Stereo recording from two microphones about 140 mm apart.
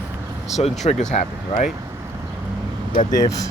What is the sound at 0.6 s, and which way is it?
Speech, 50° left (ahead or behind).